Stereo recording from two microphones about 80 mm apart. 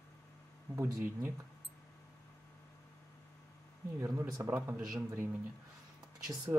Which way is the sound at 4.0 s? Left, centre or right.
Right.